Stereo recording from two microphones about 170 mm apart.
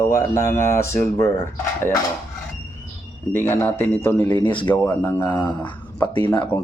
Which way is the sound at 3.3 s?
10° left (ahead or behind).